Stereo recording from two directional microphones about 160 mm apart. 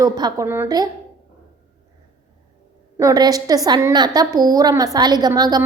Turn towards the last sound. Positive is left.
turn(degrees=-25)  # may be behind; listen again after turning